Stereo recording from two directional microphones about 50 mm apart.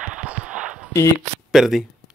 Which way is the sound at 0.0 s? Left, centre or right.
Centre.